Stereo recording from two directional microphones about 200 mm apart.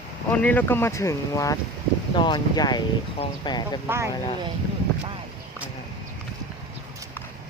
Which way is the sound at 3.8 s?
10° right (ahead or behind).